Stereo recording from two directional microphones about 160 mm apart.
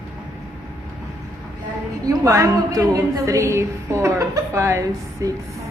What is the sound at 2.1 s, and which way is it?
A woman's voice, 20° right (ahead or behind).